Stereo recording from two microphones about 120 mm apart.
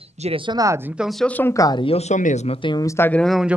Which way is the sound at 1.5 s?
30° left (ahead or behind).